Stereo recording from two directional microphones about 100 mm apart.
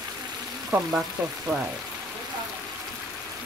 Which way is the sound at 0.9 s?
5° right (ahead or behind).